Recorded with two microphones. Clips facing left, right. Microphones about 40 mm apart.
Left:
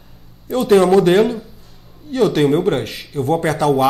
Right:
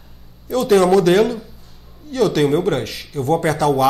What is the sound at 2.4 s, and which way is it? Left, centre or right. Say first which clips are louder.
A man's voice: left 2 dB; left.